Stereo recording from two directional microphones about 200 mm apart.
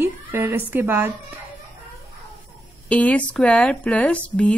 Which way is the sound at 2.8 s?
5° left (ahead or behind).